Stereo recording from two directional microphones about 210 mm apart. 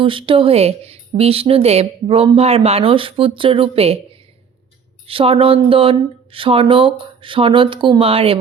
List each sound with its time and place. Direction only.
0.0 s speech: 25° right (ahead or behind)